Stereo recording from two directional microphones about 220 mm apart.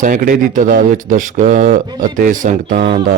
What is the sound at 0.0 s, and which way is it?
Speech, 35° right (ahead or behind).